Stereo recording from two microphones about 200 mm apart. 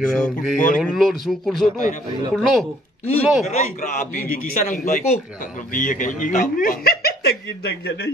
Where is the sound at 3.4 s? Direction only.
35° left (ahead or behind); by 8.1 s 55° left (ahead or behind).